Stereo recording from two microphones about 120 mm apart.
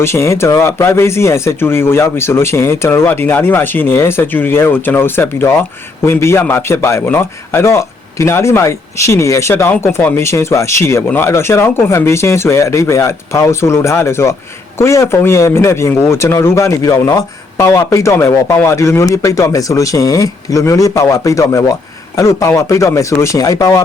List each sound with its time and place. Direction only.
0.0 s speech: 20° left (ahead or behind)